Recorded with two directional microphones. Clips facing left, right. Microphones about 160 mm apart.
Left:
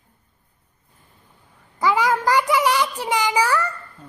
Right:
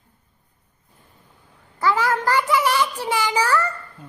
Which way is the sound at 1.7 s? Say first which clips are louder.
Left 1 dB; 15° left (ahead or behind).